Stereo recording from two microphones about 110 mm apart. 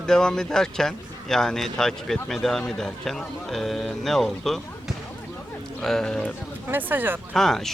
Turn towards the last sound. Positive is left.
turn(degrees=5)  # may be behind; listen again after turning